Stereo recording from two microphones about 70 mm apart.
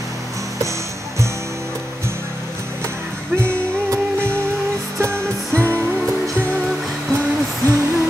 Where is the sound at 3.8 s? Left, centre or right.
Right.